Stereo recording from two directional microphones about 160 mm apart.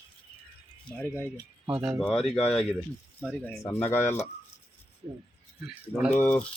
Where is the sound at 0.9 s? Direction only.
15° left (ahead or behind).